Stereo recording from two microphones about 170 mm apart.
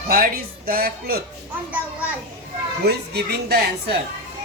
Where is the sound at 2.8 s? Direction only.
75° right (ahead or behind).